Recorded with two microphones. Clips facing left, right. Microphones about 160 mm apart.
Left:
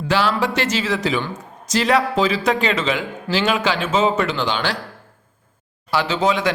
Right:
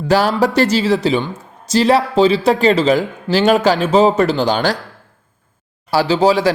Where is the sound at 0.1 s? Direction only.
40° right (ahead or behind).